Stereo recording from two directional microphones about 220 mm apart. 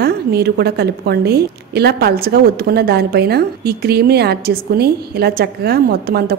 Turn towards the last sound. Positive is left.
turn(degrees=-45)  # may be behind; listen again after turning